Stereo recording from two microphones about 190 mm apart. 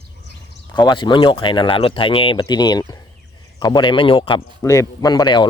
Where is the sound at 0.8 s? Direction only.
25° left (ahead or behind).